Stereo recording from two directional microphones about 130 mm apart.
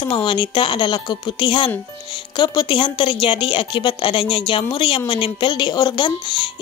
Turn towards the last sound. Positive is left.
turn(degrees=40)  # may be behind; listen again after turning